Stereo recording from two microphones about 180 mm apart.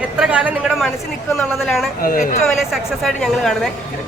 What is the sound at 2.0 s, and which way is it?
Speech, 50° left (ahead or behind).